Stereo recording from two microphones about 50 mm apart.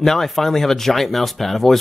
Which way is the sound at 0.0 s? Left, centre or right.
Centre.